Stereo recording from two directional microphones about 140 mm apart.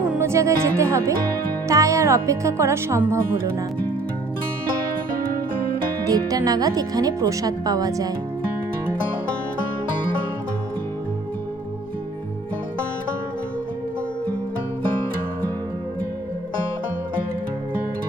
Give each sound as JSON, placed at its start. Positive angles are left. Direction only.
{"t": 0.2, "sound": "speech", "side_deg": -20}
{"t": 6.1, "sound": "speech", "side_deg": -25}